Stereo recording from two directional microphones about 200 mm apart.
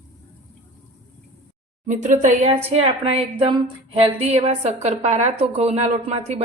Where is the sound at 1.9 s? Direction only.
40° right (ahead or behind).